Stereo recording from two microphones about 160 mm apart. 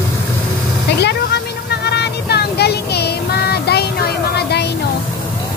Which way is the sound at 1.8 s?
90° left.